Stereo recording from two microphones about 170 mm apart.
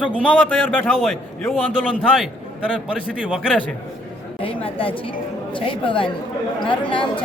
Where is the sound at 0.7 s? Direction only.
10° left (ahead or behind).